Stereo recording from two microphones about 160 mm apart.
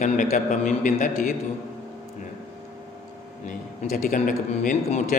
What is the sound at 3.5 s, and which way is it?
A man's voice, 60° left (ahead or behind).